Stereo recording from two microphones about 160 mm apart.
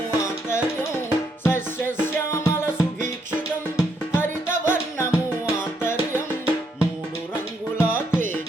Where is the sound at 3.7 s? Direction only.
15° left (ahead or behind).